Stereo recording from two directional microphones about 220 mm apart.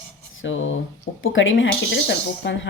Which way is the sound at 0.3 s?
60° left (ahead or behind).